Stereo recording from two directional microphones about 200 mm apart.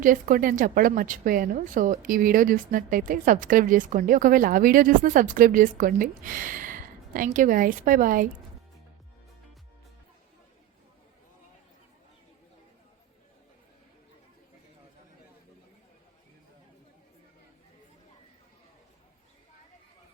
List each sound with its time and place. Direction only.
0.0 s a woman's voice: 45° right (ahead or behind)